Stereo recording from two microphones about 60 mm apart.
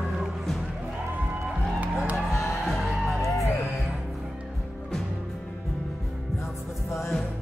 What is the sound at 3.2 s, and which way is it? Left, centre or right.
Music, left.